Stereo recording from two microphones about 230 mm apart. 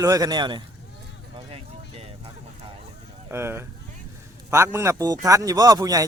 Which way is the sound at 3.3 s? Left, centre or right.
Centre.